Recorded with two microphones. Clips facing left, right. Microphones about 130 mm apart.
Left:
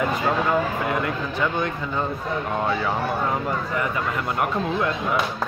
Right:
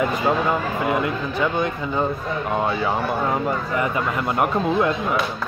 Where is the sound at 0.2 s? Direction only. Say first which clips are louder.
Right 1 dB; 10° right (ahead or behind).